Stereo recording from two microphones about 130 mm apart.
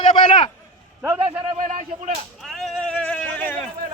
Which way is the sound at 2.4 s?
Centre (ahead or behind).